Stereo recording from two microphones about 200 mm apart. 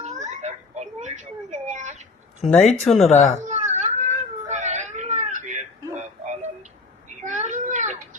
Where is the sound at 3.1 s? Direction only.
35° left (ahead or behind).